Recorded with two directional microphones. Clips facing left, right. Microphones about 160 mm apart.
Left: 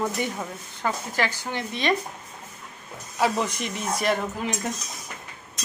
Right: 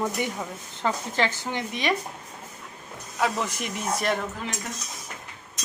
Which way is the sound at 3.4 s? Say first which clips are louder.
Left 2 dB; centre (ahead or behind).